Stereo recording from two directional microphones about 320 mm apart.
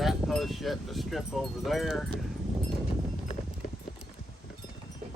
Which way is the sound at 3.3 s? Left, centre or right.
Centre.